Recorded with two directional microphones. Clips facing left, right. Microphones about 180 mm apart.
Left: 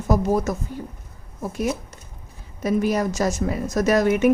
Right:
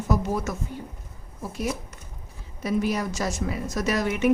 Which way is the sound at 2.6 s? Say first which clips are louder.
Left 4 dB; 45° left (ahead or behind).